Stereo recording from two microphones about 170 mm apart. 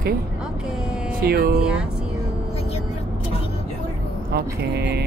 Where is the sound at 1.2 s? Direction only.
65° right (ahead or behind).